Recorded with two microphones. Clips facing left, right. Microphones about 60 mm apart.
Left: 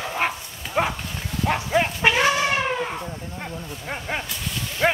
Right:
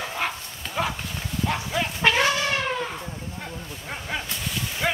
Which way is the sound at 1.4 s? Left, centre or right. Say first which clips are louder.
Left 6 dB; left.